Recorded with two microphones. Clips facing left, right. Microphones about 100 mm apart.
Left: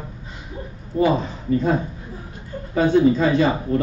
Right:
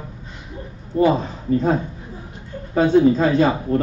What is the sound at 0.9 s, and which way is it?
Speech, 45° right (ahead or behind).